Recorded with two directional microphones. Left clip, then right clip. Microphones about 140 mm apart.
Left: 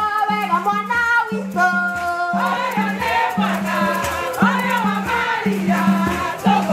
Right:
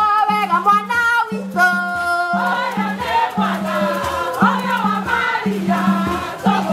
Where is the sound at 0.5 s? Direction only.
35° right (ahead or behind).